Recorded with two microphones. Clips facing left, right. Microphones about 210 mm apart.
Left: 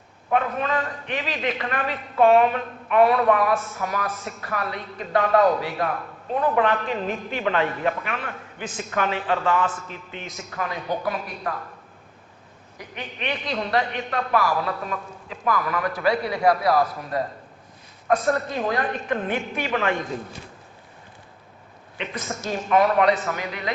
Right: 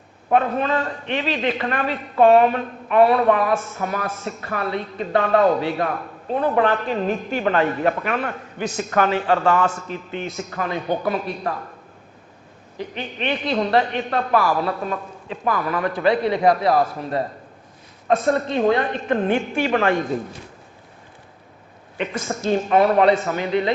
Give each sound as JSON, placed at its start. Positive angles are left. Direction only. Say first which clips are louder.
{"t": 0.3, "sound": "a man's voice", "louder": "right 4 dB", "side_deg": -30}
{"t": 12.7, "sound": "a man's voice", "louder": "right 7 dB", "side_deg": -30}
{"t": 22.4, "sound": "a man's voice", "louder": "right 3 dB", "side_deg": -30}